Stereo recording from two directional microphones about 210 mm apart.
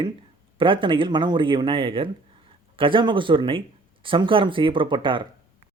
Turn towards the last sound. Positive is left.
turn(degrees=-25)  # may be behind; listen again after turning